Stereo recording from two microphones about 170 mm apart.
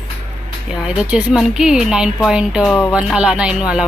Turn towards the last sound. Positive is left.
turn(degrees=-5)  # may be behind; listen again after turning